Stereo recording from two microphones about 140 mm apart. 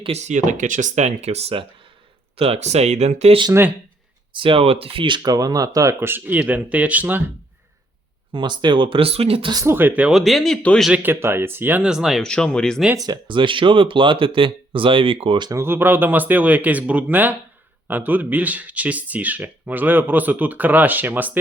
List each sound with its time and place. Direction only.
0.0 s speech: 50° right (ahead or behind)
4.3 s speech: 40° right (ahead or behind); by 7.2 s 10° right (ahead or behind)
8.3 s speech: 35° right (ahead or behind)
9.5 s speech: 20° right (ahead or behind); by 10.8 s 5° left (ahead or behind)
10.8 s speech: 10° right (ahead or behind); by 12.8 s 5° left (ahead or behind)
13.0 s speech: 30° right (ahead or behind)
15.5 s speech: 15° right (ahead or behind)